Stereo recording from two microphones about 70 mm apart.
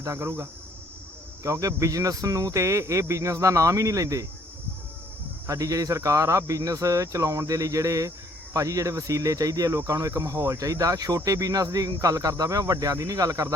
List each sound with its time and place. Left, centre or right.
0.0 s speech: right
1.5 s speech: right
5.5 s speech: right